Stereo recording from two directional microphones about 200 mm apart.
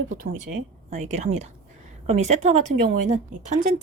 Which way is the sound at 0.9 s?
35° right (ahead or behind).